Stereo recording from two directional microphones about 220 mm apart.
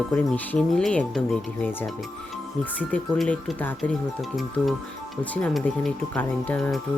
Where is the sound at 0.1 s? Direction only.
5° left (ahead or behind).